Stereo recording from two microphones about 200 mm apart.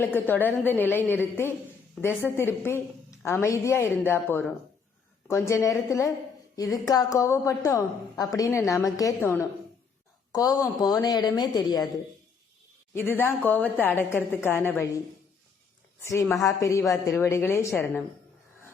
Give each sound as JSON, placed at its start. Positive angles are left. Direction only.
{"t": 0.0, "sound": "a woman's voice", "side_deg": 10}
{"t": 12.9, "sound": "a woman's voice", "side_deg": 10}
{"t": 16.3, "sound": "a woman's voice", "side_deg": 15}